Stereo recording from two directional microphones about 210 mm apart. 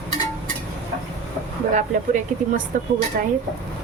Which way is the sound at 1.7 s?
35° right (ahead or behind).